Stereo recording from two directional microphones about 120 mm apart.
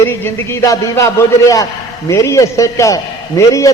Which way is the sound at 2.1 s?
25° left (ahead or behind).